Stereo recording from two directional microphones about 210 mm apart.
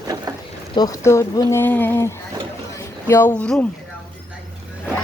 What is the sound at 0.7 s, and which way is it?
Speech, 15° left (ahead or behind).